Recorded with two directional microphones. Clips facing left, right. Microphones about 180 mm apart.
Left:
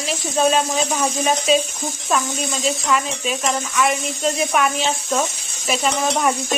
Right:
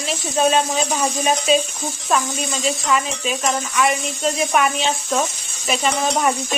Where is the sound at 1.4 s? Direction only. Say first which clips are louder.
Even; centre (ahead or behind).